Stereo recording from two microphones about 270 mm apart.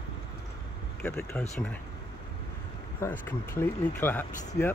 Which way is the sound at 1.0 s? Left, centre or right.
Centre.